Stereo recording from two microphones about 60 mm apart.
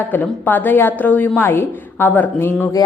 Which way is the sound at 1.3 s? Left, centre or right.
Left.